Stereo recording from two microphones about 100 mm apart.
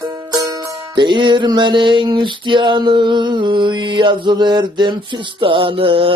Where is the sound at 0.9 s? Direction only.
50° right (ahead or behind).